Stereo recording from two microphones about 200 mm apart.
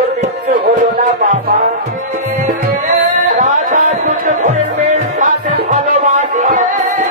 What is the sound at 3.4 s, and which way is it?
Music, 35° right (ahead or behind).